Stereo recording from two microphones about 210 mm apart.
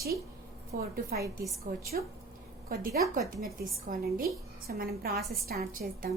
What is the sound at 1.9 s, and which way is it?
A woman's voice, 40° right (ahead or behind).